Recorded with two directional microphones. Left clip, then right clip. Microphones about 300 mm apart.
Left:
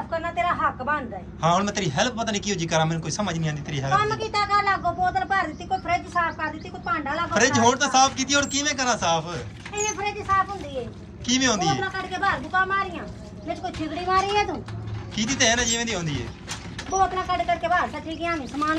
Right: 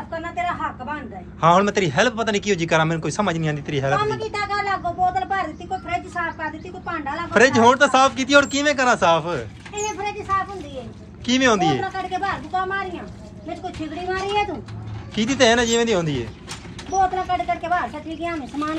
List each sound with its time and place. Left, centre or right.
0.2 s a sound: centre
1.4 s a man's voice: centre
16.9 s speech: centre
17.3 s speech: centre